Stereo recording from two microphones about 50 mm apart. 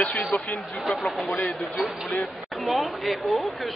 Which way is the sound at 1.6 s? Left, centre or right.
Left.